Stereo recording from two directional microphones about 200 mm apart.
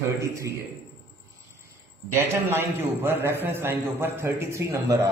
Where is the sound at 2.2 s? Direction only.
10° right (ahead or behind).